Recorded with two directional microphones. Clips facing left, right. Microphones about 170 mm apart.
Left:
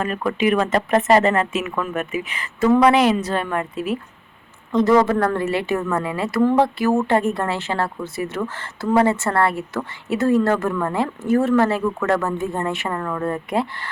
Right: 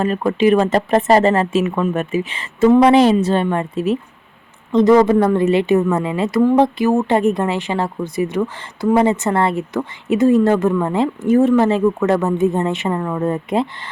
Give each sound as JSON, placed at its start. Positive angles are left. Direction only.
{"t": 0.0, "sound": "a woman's voice", "side_deg": -30}